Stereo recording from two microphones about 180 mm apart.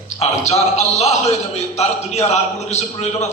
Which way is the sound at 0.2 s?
35° left (ahead or behind).